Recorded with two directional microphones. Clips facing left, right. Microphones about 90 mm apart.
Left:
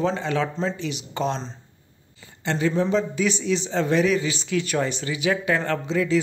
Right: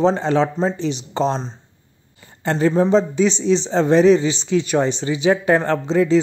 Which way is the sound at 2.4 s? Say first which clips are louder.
Right 6 dB; 40° right (ahead or behind).